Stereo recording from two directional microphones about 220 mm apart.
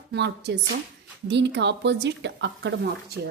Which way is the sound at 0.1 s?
50° right (ahead or behind).